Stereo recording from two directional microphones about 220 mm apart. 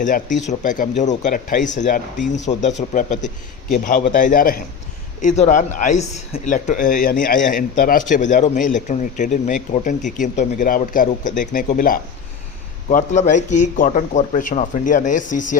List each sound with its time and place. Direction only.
0.0 s speech: 35° left (ahead or behind)